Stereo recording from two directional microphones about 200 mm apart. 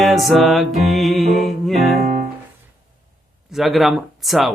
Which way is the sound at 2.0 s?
40° right (ahead or behind).